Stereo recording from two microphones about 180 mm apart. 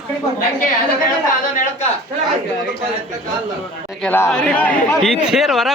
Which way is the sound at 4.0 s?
5° left (ahead or behind).